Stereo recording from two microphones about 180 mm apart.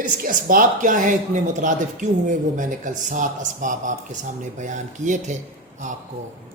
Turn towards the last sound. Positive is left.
turn(degrees=-45)  # may be behind; listen again after turning